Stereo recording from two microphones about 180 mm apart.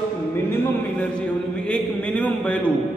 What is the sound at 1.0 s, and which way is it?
A man's voice, 5° left (ahead or behind).